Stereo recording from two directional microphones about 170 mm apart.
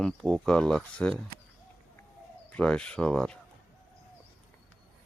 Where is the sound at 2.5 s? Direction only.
5° left (ahead or behind).